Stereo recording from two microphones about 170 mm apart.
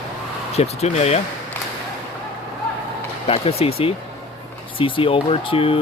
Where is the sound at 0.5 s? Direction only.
40° left (ahead or behind).